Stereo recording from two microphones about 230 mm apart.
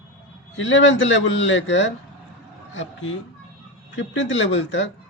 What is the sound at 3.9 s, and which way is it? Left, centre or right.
Speech, left.